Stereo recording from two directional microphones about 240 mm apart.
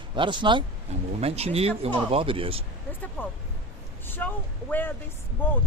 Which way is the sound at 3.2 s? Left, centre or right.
Centre.